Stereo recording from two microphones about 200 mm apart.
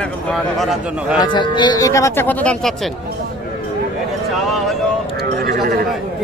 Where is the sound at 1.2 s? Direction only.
25° left (ahead or behind); by 2.9 s 5° left (ahead or behind).